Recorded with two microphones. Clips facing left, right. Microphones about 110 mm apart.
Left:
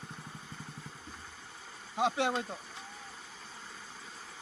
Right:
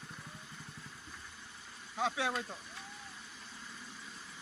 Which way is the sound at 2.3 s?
25° left (ahead or behind).